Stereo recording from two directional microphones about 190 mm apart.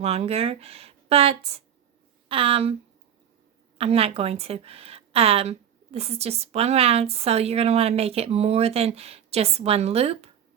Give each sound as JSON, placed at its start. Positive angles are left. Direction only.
{"t": 0.0, "sound": "a woman's voice", "side_deg": -35}
{"t": 3.8, "sound": "a woman's voice", "side_deg": -30}